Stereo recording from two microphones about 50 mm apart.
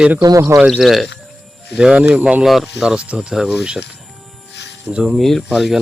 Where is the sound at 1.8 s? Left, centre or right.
Right.